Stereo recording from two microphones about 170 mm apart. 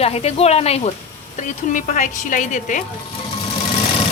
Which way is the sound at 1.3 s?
50° left (ahead or behind).